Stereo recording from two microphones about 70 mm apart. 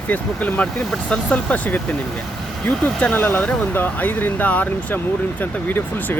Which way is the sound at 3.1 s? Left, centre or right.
Left.